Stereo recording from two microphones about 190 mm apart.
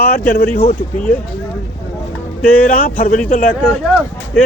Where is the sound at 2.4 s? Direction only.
5° left (ahead or behind).